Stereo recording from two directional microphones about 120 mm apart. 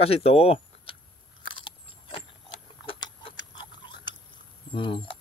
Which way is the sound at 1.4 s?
40° left (ahead or behind).